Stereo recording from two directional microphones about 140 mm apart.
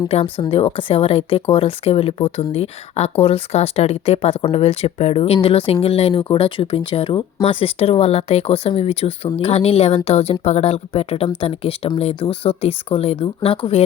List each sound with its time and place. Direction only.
0.1 s speech: 45° left (ahead or behind)